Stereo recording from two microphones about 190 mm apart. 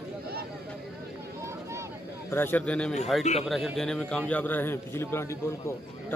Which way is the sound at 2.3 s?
10° left (ahead or behind).